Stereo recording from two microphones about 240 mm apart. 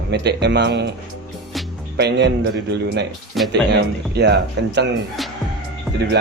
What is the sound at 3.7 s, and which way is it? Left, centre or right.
Speech, right.